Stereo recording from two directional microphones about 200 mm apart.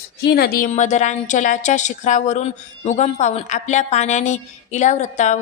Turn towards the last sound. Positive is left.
turn(degrees=35)  # may be behind; listen again after turning